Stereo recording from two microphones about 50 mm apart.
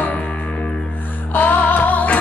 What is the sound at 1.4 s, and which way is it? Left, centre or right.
Music, left.